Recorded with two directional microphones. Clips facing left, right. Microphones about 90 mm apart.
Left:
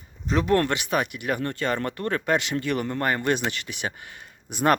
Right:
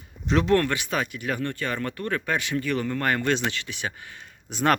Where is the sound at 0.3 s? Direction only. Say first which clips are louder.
Right 1 dB; 5° left (ahead or behind).